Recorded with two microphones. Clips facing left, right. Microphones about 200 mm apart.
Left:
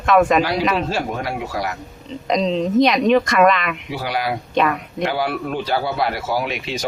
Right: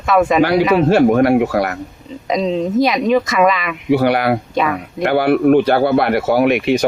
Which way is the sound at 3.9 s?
60° right (ahead or behind).